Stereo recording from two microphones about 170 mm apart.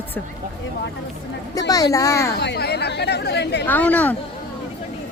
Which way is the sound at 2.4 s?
75° left (ahead or behind).